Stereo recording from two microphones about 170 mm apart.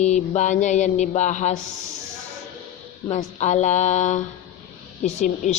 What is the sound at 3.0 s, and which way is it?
Mantra, 45° left (ahead or behind).